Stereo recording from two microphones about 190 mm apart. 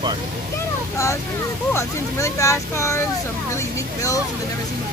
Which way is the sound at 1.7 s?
15° left (ahead or behind).